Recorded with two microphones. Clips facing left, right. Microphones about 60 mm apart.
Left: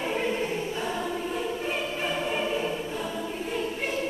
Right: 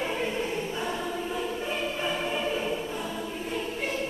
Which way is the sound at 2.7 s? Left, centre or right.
Centre.